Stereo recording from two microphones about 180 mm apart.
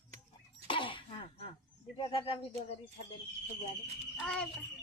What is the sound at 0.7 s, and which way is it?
Cough, 30° left (ahead or behind).